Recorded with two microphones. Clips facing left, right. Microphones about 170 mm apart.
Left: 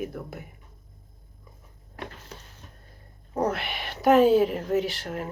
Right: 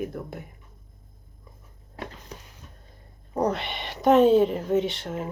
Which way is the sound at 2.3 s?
15° right (ahead or behind).